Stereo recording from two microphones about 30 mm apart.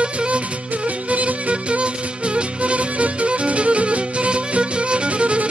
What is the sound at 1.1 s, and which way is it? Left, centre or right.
Music, right.